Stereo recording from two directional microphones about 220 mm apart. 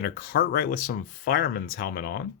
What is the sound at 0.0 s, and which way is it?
Speech, 40° left (ahead or behind).